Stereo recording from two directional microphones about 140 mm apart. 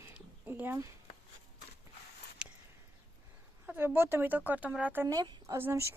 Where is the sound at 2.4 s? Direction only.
5° right (ahead or behind).